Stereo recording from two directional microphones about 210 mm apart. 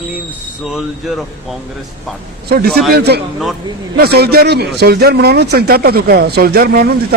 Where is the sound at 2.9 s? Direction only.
50° right (ahead or behind).